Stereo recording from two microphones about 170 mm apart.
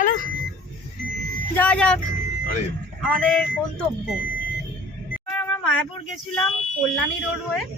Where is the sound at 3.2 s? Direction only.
5° left (ahead or behind).